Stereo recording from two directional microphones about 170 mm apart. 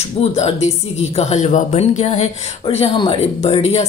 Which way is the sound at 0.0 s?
40° left (ahead or behind).